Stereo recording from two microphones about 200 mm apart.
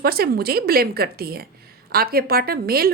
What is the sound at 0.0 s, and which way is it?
A woman's voice, 50° right (ahead or behind).